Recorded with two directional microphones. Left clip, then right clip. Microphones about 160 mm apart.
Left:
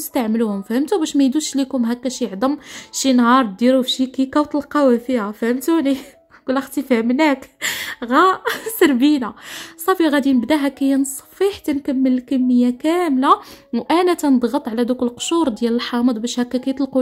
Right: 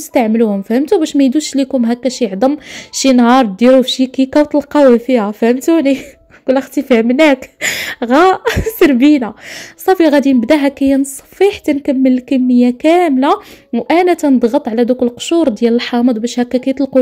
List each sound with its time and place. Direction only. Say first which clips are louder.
0.1 s a woman's voice: right 8 dB; 10° right (ahead or behind)
7.6 s a woman's voice: right 7 dB; 25° right (ahead or behind); by 17.0 s 10° right (ahead or behind)